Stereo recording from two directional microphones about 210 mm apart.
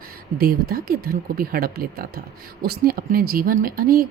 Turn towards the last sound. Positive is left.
turn(degrees=-45)  # may be behind; listen again after turning